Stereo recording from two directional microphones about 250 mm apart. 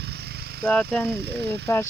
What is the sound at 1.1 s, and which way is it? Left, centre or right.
Speech, right.